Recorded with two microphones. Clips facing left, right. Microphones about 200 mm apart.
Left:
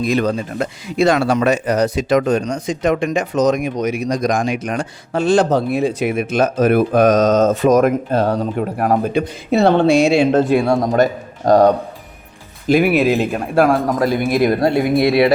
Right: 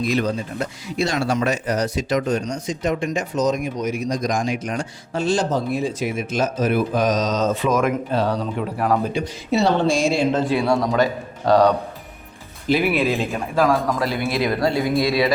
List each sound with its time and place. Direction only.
0.1 s speech: 60° left (ahead or behind)